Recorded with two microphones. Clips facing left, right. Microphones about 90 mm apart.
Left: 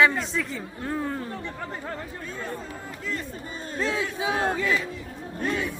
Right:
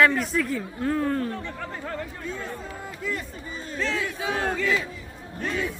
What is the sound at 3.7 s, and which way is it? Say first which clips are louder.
Battle cry: left 1 dB; 15° left (ahead or behind).